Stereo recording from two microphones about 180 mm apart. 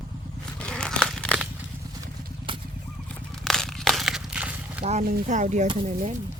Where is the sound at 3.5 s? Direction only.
Centre (ahead or behind).